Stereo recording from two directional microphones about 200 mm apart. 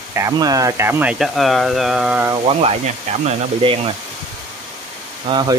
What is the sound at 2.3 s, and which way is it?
Speech, 30° right (ahead or behind).